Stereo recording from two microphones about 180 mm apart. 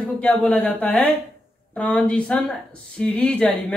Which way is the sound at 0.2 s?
5° left (ahead or behind).